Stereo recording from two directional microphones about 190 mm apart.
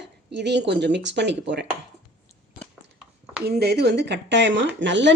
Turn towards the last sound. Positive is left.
turn(degrees=-70)  # may be behind; listen again after turning